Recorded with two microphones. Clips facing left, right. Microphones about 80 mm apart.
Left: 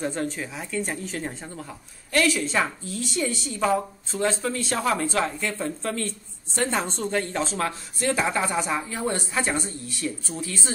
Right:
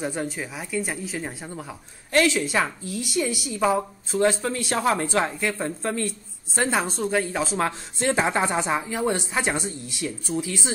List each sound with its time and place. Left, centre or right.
0.0 s speech: centre
4.7 s speech: right
5.3 s speech: centre
7.5 s speech: right